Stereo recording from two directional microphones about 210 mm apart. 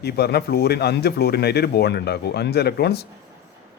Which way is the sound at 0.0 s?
50° left (ahead or behind).